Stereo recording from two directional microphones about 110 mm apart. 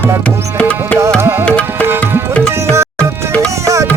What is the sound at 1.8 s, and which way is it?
Tabla, 20° right (ahead or behind).